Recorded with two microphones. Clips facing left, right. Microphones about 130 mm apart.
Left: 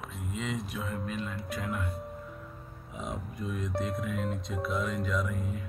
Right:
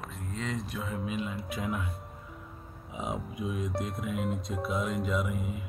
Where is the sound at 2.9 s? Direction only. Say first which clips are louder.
Right 3 dB; centre (ahead or behind).